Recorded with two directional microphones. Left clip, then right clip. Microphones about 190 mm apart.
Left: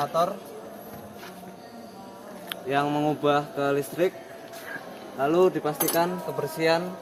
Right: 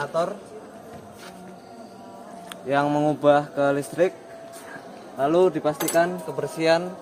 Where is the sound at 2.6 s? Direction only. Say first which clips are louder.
Right 3 dB; 60° right (ahead or behind).